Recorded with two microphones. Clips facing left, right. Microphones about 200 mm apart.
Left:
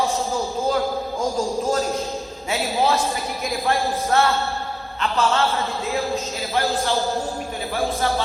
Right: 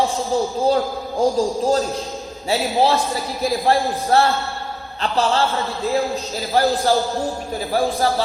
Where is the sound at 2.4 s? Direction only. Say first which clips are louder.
Right 4 dB; 30° right (ahead or behind).